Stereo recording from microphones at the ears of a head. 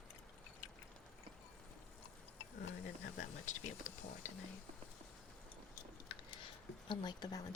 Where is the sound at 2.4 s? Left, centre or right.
Left.